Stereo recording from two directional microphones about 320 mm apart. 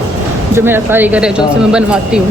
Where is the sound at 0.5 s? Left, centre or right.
Centre.